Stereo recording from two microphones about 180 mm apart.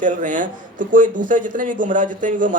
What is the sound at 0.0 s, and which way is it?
A man's voice, 45° right (ahead or behind).